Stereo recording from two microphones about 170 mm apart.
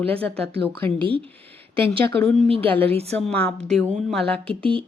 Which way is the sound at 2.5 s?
35° right (ahead or behind).